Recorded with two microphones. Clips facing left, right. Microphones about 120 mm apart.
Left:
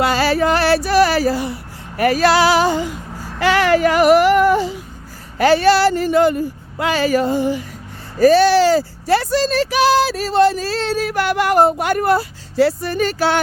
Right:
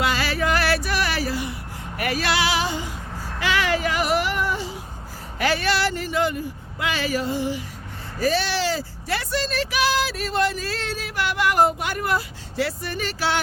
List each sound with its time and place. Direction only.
0.0 s music: 35° left (ahead or behind)
2.0 s speech: 40° left (ahead or behind)
3.4 s a sound: 50° left (ahead or behind)
5.4 s speech: 35° left (ahead or behind)
10.9 s speech: 45° left (ahead or behind)
12.1 s speech: 35° left (ahead or behind)